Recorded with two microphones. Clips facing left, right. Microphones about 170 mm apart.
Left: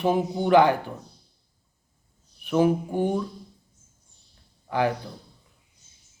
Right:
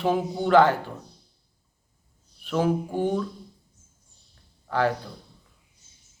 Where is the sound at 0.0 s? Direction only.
20° left (ahead or behind).